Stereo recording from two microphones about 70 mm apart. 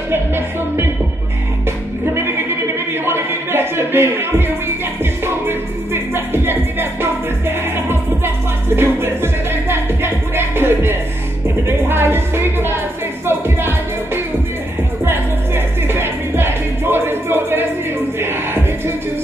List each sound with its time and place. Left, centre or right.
2.9 s music: right